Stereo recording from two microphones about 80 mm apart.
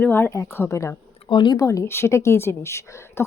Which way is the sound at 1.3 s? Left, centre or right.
Left.